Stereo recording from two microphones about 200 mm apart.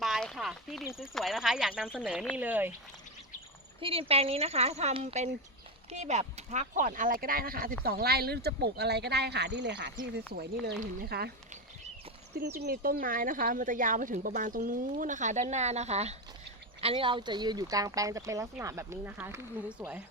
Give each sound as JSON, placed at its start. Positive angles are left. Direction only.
{"t": 0.0, "sound": "a sound", "side_deg": 0}
{"t": 0.9, "sound": "speech", "side_deg": 0}
{"t": 3.8, "sound": "speech", "side_deg": -25}
{"t": 10.3, "sound": "speech", "side_deg": -50}
{"t": 12.5, "sound": "speech", "side_deg": -45}